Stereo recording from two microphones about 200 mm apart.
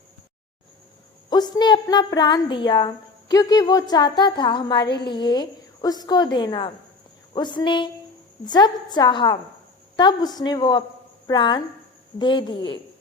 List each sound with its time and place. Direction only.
1.3 s a woman's voice: 20° left (ahead or behind)